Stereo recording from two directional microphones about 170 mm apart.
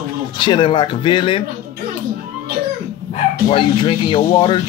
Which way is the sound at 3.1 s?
45° left (ahead or behind).